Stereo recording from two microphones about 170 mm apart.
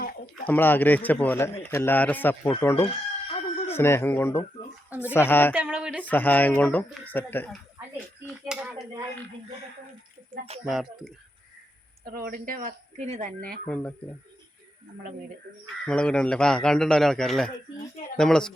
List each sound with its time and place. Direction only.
0.4 s a man's voice: 10° left (ahead or behind)
2.8 s chicken: 35° left (ahead or behind)
3.8 s a man's voice: 15° left (ahead or behind)
5.5 s speech: 5° right (ahead or behind)
6.0 s a man's voice: 10° left (ahead or behind)
8.4 s a sound: 5° right (ahead or behind)
10.7 s a man's voice: centre (ahead or behind)
12.0 s speech: 60° right (ahead or behind); by 13.3 s 40° right (ahead or behind)
13.7 s a man's voice: 5° left (ahead or behind)
15.9 s a man's voice: 5° left (ahead or behind)